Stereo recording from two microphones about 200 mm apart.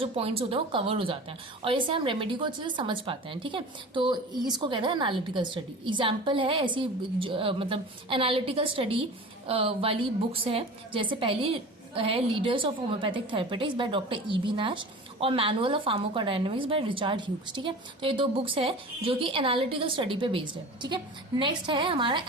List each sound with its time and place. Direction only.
0.0 s a woman's voice: 30° right (ahead or behind)